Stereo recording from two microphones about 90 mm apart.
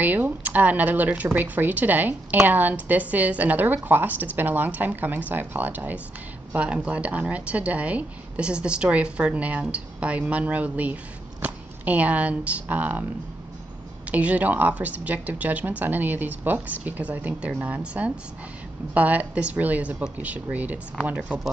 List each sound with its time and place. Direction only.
0.0 s a woman's voice: 20° right (ahead or behind)
14.0 s a woman's voice: 15° right (ahead or behind)